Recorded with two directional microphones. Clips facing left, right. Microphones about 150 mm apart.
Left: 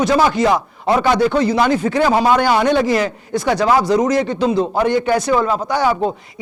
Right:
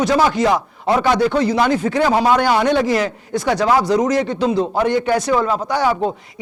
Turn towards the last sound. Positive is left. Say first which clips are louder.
# left 1 dB
turn(degrees=15)  # may be behind; listen again after turning